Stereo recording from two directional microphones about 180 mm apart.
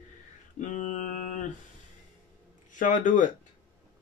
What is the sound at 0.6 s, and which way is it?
Mantra, 40° left (ahead or behind).